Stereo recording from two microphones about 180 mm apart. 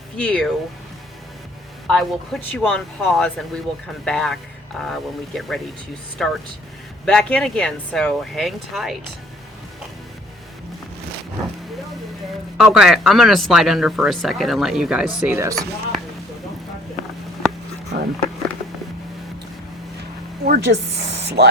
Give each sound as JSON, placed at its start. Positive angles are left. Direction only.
{"t": 0.2, "sound": "speech", "side_deg": 5}
{"t": 1.9, "sound": "speech", "side_deg": 0}
{"t": 12.5, "sound": "speech", "side_deg": -5}
{"t": 17.9, "sound": "a sound", "side_deg": -75}
{"t": 20.4, "sound": "speech", "side_deg": -65}